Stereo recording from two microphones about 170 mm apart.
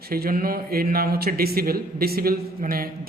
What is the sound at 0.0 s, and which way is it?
A man's voice, 60° right (ahead or behind).